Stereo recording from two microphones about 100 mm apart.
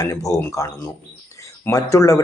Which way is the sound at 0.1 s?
30° left (ahead or behind).